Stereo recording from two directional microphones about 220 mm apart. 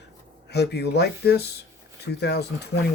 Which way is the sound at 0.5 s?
50° left (ahead or behind).